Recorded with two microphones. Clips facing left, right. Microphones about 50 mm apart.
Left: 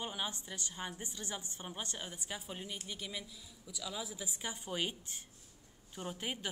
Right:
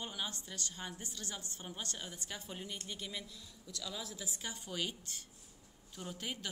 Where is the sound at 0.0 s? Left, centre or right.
Centre.